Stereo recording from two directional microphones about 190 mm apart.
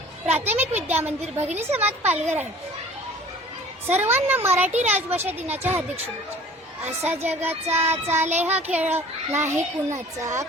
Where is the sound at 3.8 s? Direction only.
10° right (ahead or behind).